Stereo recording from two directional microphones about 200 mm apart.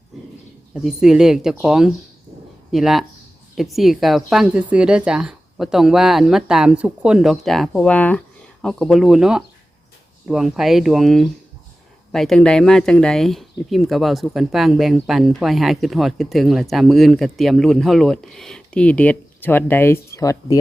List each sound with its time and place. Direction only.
0.7 s speech: 5° right (ahead or behind); by 20.6 s 15° left (ahead or behind)